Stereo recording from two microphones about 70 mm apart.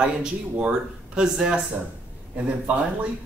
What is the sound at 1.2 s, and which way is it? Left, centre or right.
Speech, centre.